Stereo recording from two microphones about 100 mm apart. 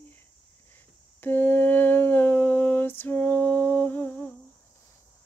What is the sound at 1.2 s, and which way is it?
Humming, 20° left (ahead or behind).